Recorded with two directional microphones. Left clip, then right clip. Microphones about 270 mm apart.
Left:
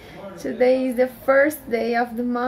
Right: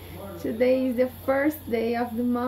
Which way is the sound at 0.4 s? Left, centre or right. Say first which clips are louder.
Left 4 dB; centre.